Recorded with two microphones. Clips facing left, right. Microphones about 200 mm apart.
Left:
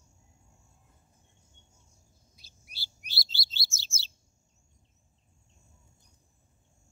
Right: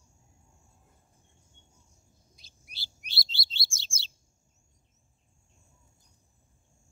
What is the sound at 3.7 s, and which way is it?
Chirp, 10° right (ahead or behind).